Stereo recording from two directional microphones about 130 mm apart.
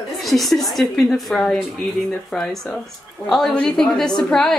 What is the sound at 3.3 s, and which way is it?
A woman's voice, 5° left (ahead or behind).